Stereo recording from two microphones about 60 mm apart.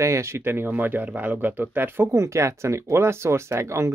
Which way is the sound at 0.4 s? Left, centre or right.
Right.